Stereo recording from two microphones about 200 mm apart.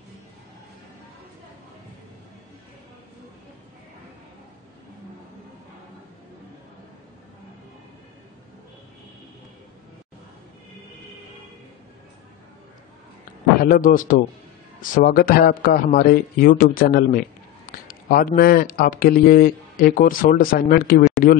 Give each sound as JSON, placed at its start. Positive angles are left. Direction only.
{"t": 13.6, "sound": "a man's voice", "side_deg": 45}